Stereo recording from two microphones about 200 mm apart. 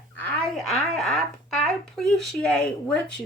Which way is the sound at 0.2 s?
5° left (ahead or behind).